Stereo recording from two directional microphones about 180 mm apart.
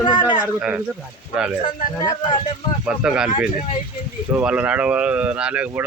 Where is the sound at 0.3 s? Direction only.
10° right (ahead or behind).